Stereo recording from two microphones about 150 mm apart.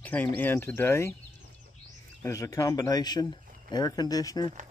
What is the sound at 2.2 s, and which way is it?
Speech, 20° left (ahead or behind).